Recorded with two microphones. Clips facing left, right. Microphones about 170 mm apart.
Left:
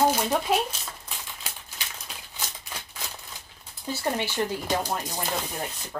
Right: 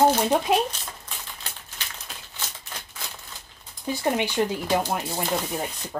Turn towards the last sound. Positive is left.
turn(degrees=-15)  # may be behind; listen again after turning